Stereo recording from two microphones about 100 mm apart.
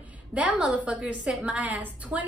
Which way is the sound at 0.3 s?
10° right (ahead or behind).